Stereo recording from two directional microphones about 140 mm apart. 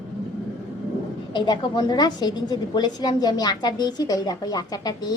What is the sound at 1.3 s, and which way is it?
A woman's voice, 30° left (ahead or behind).